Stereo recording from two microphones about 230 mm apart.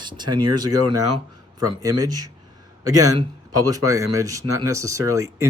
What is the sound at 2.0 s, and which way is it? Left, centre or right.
Speech, centre.